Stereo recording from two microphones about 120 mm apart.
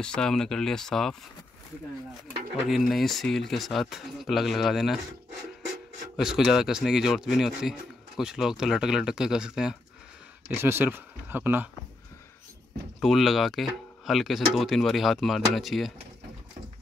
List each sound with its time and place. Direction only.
0.0 s speech: 5° left (ahead or behind)
2.7 s speech: centre (ahead or behind)
6.1 s speech: 5° right (ahead or behind)
10.5 s speech: 20° right (ahead or behind)
13.0 s speech: centre (ahead or behind)